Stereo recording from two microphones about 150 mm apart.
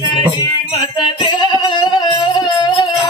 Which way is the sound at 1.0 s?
30° left (ahead or behind).